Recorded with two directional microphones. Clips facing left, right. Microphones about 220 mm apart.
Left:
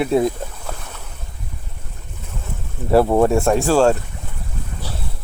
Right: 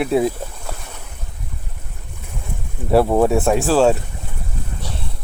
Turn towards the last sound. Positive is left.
turn(degrees=0)  # may be behind; listen again after turning